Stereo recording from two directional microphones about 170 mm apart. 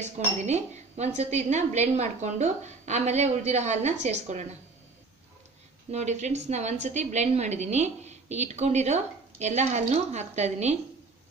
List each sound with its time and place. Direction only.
0.0 s a woman's voice: 40° right (ahead or behind)
5.9 s a woman's voice: 40° right (ahead or behind)